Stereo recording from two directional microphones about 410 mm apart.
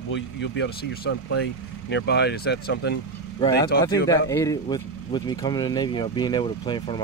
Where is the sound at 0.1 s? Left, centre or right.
Left.